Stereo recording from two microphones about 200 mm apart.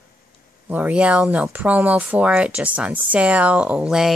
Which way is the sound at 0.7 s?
5° right (ahead or behind).